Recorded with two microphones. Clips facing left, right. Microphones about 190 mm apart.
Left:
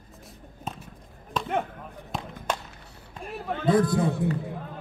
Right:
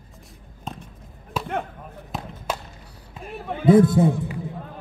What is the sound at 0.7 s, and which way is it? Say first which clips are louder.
Basketball bounce: right 1 dB; 5° left (ahead or behind).